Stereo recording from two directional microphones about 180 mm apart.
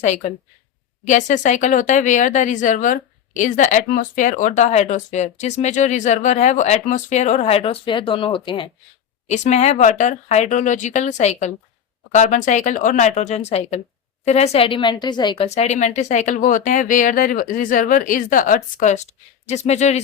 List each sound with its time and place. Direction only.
0.0 s speech: 40° left (ahead or behind)
9.2 s a woman's voice: 40° left (ahead or behind)
15.4 s a woman's voice: 35° left (ahead or behind)